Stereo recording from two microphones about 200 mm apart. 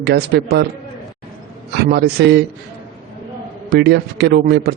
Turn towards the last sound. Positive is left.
turn(degrees=-55)  # may be behind; listen again after turning